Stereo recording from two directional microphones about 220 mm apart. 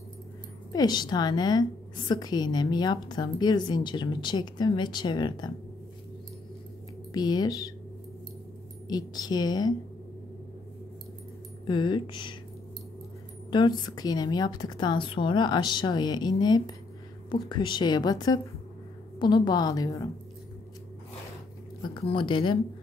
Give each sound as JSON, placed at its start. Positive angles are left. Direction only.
{"t": 0.7, "sound": "a woman's voice", "side_deg": 20}
{"t": 7.2, "sound": "a woman's voice", "side_deg": 20}
{"t": 8.8, "sound": "a woman's voice", "side_deg": 20}
{"t": 11.6, "sound": "a woman's voice", "side_deg": 20}
{"t": 13.5, "sound": "a woman's voice", "side_deg": 20}
{"t": 21.8, "sound": "a woman's voice", "side_deg": 20}